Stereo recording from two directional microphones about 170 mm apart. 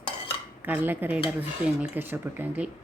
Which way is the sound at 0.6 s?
10° right (ahead or behind).